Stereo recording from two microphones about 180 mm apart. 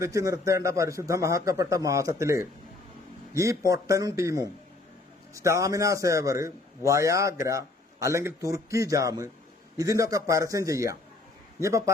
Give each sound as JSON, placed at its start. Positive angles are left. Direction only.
{"t": 0.0, "sound": "a man's voice", "side_deg": -20}